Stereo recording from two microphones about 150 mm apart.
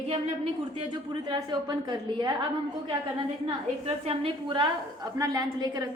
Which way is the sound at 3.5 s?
40° right (ahead or behind).